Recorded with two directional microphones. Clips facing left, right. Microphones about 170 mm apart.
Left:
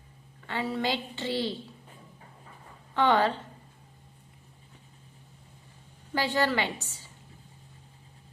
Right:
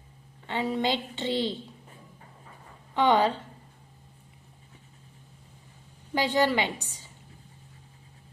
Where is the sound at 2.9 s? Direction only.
15° right (ahead or behind).